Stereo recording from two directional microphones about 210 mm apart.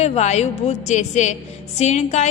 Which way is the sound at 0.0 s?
30° left (ahead or behind).